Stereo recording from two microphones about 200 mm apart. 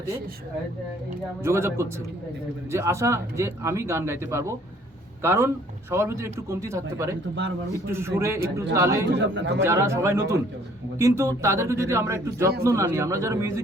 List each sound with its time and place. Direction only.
1.5 s speech: 15° right (ahead or behind)
9.1 s speech: 65° right (ahead or behind)
9.6 s speech: 15° right (ahead or behind)